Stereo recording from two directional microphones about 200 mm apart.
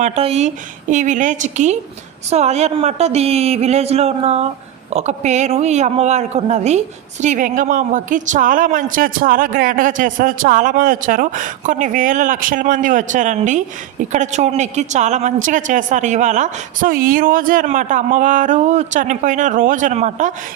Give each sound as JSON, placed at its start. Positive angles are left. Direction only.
{"t": 0.0, "sound": "a man's voice", "side_deg": -30}